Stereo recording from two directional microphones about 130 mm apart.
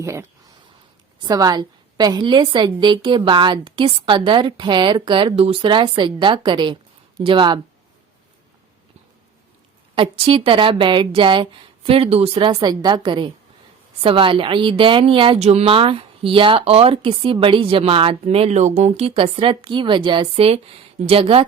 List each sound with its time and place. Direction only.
0.0 s a woman's voice: 20° right (ahead or behind); by 7.6 s 40° right (ahead or behind)
9.9 s a woman's voice: 40° right (ahead or behind)